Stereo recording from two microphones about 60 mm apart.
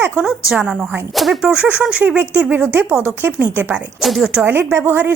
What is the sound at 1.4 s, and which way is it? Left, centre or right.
A woman's voice, centre.